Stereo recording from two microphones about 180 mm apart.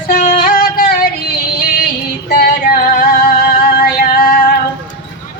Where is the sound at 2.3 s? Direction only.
55° left (ahead or behind).